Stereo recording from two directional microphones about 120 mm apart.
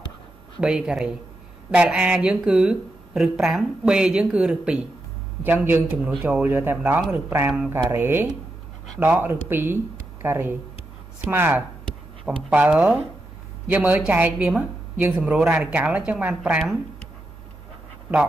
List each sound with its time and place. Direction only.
0.6 s speech: 5° right (ahead or behind)